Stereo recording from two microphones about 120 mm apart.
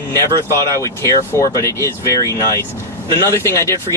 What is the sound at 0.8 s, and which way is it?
Speech, 25° left (ahead or behind).